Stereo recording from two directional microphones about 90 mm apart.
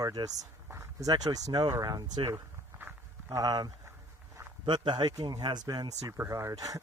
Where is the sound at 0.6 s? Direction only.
35° right (ahead or behind).